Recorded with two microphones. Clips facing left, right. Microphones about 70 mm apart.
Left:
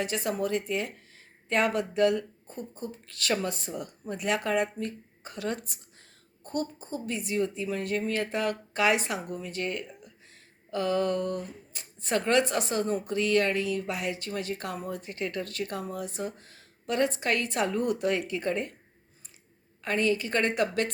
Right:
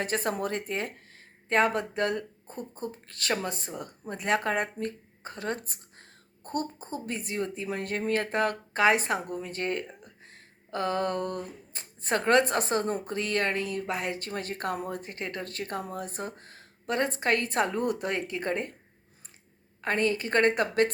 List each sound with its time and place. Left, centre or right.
0.0 s speech: right
19.8 s speech: right